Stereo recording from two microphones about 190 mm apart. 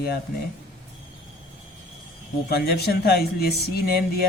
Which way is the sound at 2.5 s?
55° left (ahead or behind).